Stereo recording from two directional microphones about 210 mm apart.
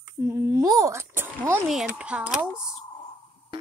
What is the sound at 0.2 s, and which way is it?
Speech, 10° right (ahead or behind).